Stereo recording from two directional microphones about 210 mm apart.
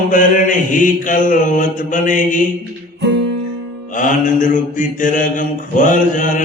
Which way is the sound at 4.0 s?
40° left (ahead or behind).